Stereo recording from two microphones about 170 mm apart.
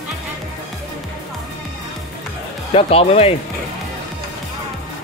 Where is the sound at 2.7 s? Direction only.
35° left (ahead or behind).